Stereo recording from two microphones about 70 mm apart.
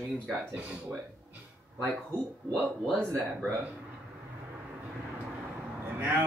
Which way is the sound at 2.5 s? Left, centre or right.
Centre.